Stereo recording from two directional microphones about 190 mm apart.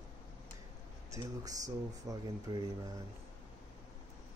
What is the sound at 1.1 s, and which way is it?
Speech, 20° right (ahead or behind).